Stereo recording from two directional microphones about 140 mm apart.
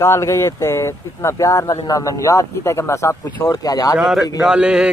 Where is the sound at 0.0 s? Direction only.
20° left (ahead or behind).